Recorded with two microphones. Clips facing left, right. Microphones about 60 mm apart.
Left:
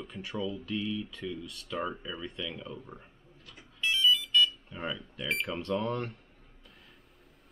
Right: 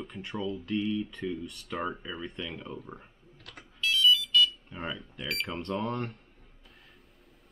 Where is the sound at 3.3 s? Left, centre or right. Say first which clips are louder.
Right 4 dB; right.